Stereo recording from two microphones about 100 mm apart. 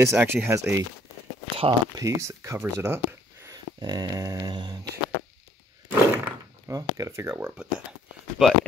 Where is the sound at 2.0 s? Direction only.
30° right (ahead or behind).